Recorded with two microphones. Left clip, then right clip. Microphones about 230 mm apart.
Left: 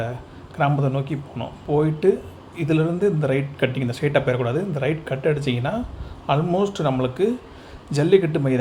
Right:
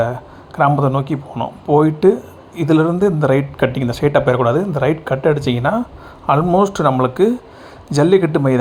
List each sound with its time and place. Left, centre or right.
0.5 s speech: centre